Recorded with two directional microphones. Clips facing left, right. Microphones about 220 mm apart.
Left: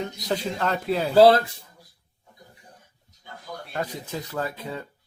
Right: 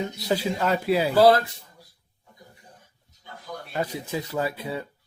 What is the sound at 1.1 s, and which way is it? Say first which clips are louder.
Speech: left 3 dB; 25° left (ahead or behind).